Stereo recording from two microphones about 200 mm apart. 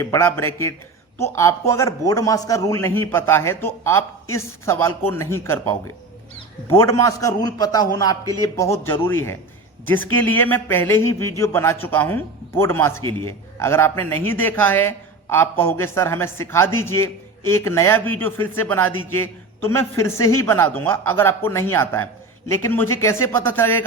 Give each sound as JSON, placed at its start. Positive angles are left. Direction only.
{"t": 0.0, "sound": "a man's voice", "side_deg": 15}